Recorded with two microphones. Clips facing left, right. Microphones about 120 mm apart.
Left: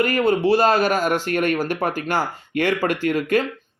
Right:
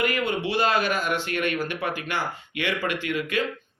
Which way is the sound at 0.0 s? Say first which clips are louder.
Left 7 dB; 40° left (ahead or behind).